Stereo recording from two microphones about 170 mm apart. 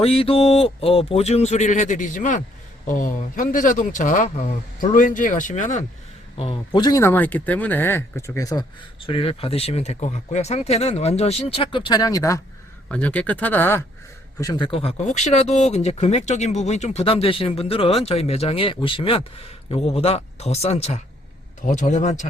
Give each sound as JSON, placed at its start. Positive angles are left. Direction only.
{"t": 0.0, "sound": "speech", "side_deg": 35}
{"t": 6.3, "sound": "speech", "side_deg": 35}
{"t": 12.9, "sound": "speech", "side_deg": 5}
{"t": 14.3, "sound": "speech", "side_deg": 25}